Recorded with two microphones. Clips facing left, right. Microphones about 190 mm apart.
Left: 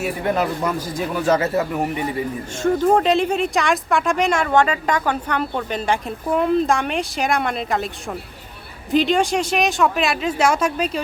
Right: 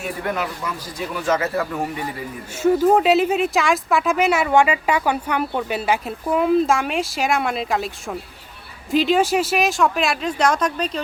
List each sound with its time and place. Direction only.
0.3 s speech: 45° left (ahead or behind)
1.5 s speech: 20° left (ahead or behind)
2.6 s speech: 10° right (ahead or behind)
8.9 s speech: centre (ahead or behind)